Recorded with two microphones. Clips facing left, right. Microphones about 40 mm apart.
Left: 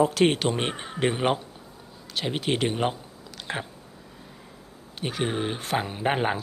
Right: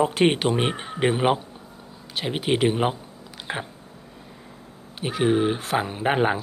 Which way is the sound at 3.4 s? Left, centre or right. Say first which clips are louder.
Right 2 dB; centre.